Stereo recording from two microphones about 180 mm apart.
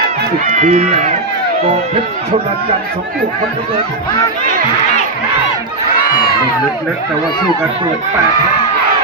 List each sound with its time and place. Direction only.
0.4 s speech: 40° right (ahead or behind)